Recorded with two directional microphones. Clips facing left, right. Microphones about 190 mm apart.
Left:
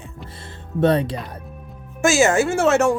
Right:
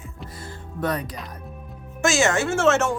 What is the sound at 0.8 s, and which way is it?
Speech, 30° left (ahead or behind).